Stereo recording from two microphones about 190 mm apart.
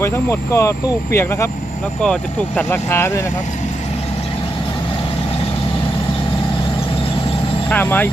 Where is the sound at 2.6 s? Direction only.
10° left (ahead or behind).